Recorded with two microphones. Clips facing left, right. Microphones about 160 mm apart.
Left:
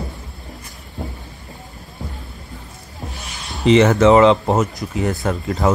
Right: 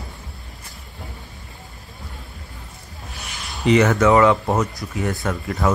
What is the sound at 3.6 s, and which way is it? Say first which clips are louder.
Speech: left 4 dB; 25° left (ahead or behind).